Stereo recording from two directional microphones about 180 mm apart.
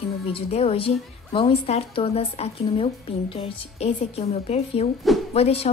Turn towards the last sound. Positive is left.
turn(degrees=35)  # may be behind; listen again after turning